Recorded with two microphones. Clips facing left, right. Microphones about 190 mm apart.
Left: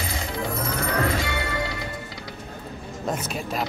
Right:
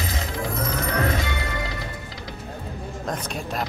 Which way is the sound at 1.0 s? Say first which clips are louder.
Even; 20° right (ahead or behind).